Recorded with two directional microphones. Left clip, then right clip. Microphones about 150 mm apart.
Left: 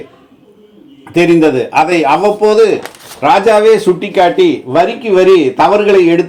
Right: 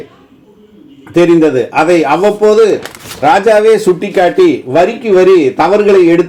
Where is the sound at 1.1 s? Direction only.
30° left (ahead or behind).